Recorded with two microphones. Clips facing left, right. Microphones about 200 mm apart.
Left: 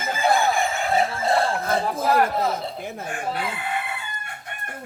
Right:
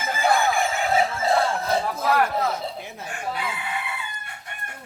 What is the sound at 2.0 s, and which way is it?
Speech, 30° left (ahead or behind).